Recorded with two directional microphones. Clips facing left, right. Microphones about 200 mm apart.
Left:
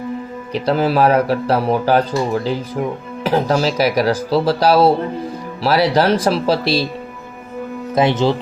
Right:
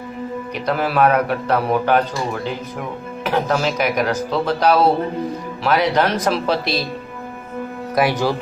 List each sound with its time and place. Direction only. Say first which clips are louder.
0.5 s speech: left 5 dB; 30° left (ahead or behind)
7.9 s speech: left 3 dB; 25° left (ahead or behind)